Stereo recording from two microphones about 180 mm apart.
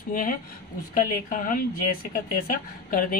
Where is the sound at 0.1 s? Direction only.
50° left (ahead or behind).